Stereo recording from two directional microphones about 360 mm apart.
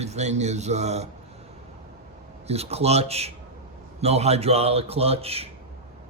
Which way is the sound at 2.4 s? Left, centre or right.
Centre.